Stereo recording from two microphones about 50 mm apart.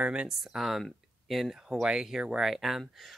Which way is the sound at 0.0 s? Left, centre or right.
Centre.